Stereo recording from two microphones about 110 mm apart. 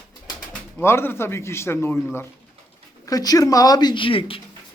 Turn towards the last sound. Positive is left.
turn(degrees=55)  # may be behind; listen again after turning